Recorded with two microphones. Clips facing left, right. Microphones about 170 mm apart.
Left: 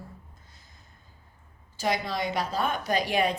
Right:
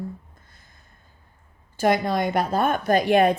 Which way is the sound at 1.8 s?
55° right (ahead or behind).